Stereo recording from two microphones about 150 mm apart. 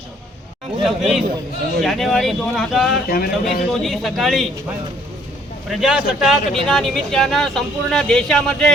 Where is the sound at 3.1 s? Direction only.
90° left.